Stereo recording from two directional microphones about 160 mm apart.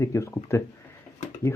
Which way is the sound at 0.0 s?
20° left (ahead or behind).